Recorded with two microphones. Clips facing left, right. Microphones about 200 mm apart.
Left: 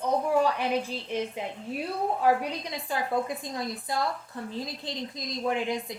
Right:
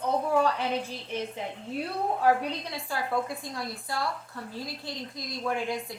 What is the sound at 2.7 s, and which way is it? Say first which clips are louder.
Speech: left 3 dB; 20° left (ahead or behind).